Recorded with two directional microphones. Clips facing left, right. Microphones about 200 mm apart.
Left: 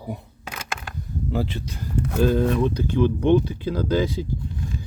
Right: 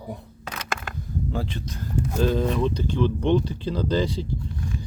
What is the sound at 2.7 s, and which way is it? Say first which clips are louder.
Speech: left 2 dB; 55° left (ahead or behind).